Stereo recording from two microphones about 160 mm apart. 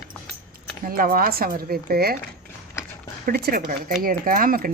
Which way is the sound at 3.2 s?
70° right (ahead or behind).